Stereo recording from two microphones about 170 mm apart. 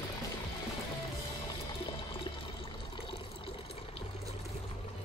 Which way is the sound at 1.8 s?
30° left (ahead or behind).